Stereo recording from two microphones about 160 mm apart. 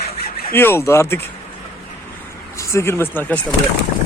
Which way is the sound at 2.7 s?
15° left (ahead or behind).